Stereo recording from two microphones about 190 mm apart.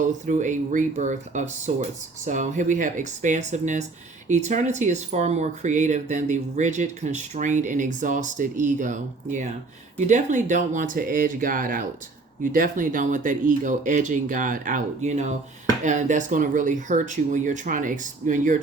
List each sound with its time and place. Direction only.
0.0 s speech: 40° right (ahead or behind)